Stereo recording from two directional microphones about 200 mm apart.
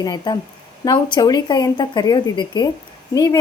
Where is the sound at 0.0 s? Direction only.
20° left (ahead or behind).